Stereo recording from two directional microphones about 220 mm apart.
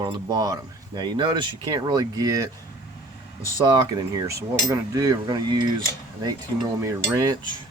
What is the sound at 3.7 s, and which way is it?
Speech, 20° right (ahead or behind).